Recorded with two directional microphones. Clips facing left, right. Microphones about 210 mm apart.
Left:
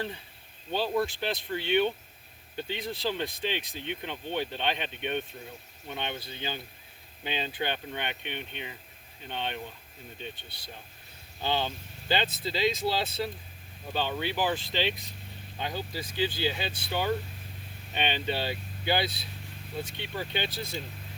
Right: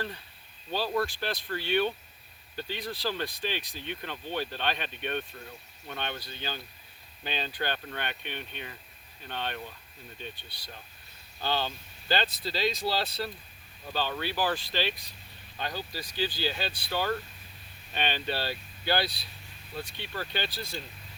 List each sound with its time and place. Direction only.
0.7 s speech: 20° left (ahead or behind)